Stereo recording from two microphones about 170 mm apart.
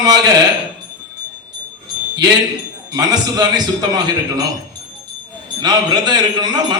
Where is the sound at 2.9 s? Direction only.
25° right (ahead or behind).